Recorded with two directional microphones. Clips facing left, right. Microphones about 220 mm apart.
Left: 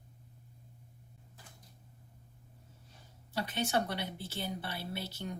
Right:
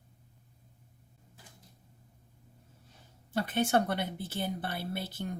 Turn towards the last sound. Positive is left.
turn(degrees=-50)  # may be behind; listen again after turning